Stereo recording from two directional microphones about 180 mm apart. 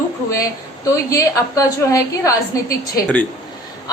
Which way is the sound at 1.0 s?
20° left (ahead or behind).